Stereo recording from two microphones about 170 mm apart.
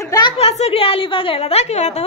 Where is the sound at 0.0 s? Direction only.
20° left (ahead or behind).